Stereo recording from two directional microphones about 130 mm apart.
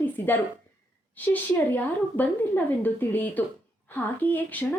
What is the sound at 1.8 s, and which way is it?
A woman's voice, 15° left (ahead or behind).